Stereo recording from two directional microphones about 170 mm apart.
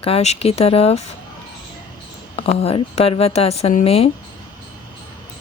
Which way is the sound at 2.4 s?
35° left (ahead or behind).